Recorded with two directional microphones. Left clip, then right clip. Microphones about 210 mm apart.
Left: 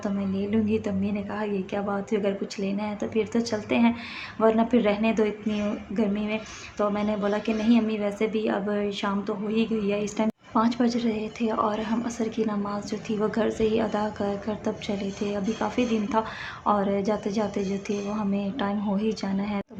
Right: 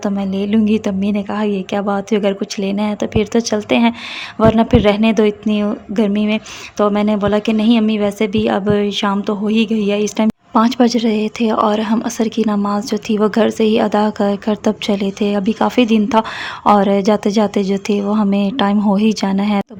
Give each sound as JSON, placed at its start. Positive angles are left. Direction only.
{"t": 0.0, "sound": "a woman's voice", "side_deg": -50}